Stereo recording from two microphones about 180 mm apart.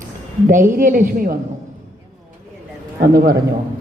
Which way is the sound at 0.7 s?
50° right (ahead or behind).